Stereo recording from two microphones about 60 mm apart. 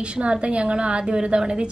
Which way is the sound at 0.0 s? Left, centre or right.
Centre.